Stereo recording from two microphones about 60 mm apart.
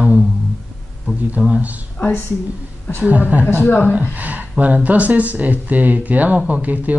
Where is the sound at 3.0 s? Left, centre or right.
Right.